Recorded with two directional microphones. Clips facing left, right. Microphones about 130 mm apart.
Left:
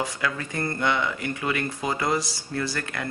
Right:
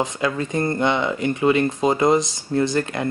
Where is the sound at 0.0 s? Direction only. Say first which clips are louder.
Right 6 dB; 25° right (ahead or behind).